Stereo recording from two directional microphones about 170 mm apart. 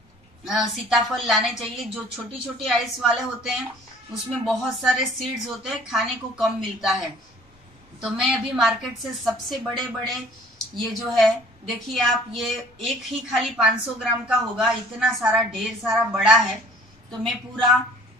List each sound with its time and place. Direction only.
0.5 s a woman's voice: centre (ahead or behind)
8.5 s a woman's voice: centre (ahead or behind)